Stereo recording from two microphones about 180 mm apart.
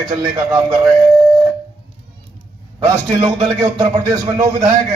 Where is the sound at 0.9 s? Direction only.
Centre (ahead or behind).